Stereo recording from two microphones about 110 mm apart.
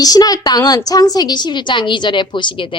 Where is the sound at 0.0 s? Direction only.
35° left (ahead or behind).